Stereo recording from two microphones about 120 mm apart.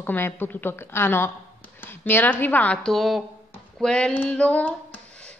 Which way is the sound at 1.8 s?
15° left (ahead or behind).